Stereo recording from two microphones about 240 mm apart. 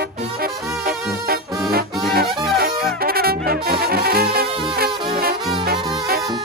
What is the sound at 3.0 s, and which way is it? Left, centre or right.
Brass instrument, right.